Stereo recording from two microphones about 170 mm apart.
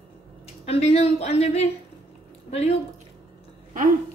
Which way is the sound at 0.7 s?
40° left (ahead or behind).